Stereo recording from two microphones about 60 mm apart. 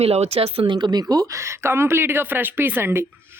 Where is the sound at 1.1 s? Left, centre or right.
Right.